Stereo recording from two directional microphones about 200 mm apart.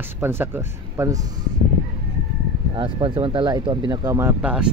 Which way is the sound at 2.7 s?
25° right (ahead or behind).